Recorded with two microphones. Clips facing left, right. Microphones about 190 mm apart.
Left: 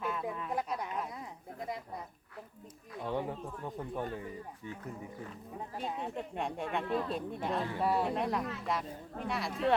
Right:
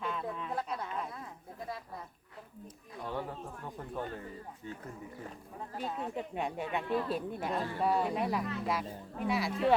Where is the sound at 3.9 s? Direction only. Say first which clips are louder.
Right 1 dB; 15° left (ahead or behind).